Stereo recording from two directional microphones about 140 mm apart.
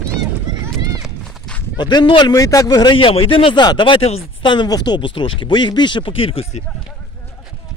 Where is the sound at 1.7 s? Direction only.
30° left (ahead or behind).